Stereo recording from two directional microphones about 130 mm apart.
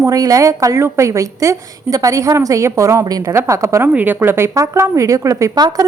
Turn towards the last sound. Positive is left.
turn(degrees=-25)  # may be behind; listen again after turning